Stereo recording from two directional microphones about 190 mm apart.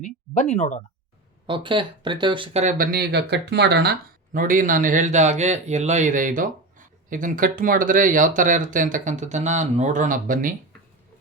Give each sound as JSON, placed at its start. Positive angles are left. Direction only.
{"t": 0.0, "sound": "speech", "side_deg": 40}
{"t": 1.5, "sound": "speech", "side_deg": -25}
{"t": 2.7, "sound": "speech", "side_deg": -50}
{"t": 4.3, "sound": "speech", "side_deg": -45}